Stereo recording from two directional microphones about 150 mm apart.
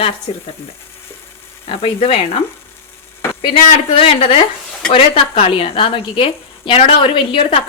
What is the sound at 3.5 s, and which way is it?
A woman's voice, 40° left (ahead or behind).